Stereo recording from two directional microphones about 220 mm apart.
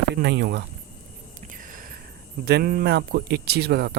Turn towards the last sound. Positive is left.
turn(degrees=-50)  # may be behind; listen again after turning